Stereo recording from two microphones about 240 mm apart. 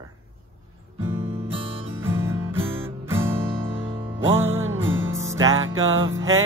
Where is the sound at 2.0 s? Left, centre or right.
Centre.